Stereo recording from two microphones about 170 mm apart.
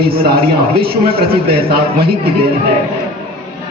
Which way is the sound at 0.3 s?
35° right (ahead or behind).